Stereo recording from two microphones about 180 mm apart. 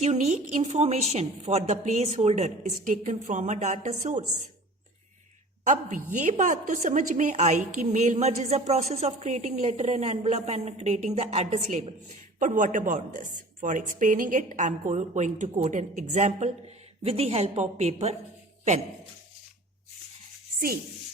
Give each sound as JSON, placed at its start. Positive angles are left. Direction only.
{"t": 0.0, "sound": "a woman's voice", "side_deg": -40}
{"t": 5.6, "sound": "a woman's voice", "side_deg": -45}